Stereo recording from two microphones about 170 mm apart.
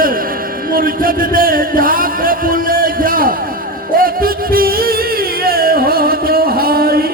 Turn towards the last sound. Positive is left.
turn(degrees=-60)  # may be behind; listen again after turning